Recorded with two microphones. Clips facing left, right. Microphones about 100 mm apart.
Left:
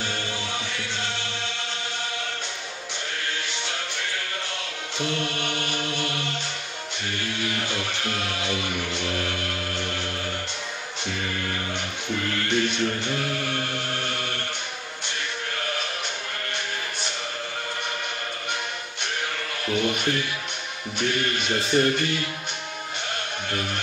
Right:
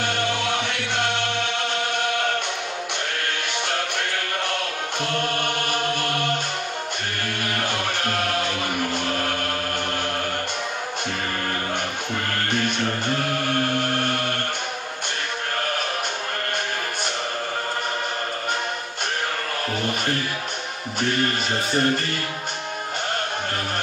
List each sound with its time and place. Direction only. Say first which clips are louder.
0.0 s music: right 7 dB; 65° right (ahead or behind)
12.3 s chant: left 1 dB; 50° right (ahead or behind)
19.7 s music: left 3 dB; 45° right (ahead or behind)